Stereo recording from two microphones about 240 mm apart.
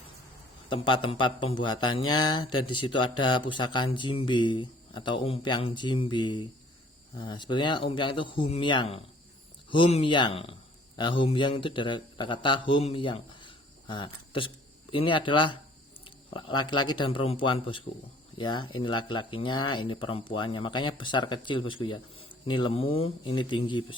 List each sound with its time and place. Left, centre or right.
0.7 s speech: left
2.0 s mantra: centre
2.9 s speech: centre
16.0 s a sound: left
16.6 s speech: centre